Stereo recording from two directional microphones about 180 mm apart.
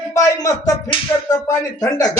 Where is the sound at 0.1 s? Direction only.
20° left (ahead or behind).